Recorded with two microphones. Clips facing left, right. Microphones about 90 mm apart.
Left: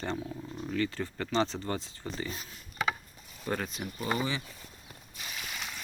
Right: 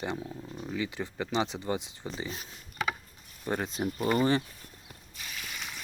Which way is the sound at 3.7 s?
35° right (ahead or behind).